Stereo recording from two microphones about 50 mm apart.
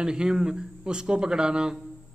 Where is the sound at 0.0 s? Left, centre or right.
Centre.